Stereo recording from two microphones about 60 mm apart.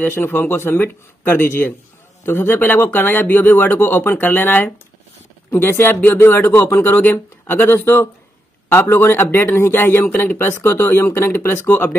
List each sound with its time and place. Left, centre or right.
0.0 s speech: left